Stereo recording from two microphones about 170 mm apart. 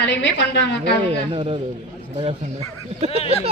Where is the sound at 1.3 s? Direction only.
35° right (ahead or behind).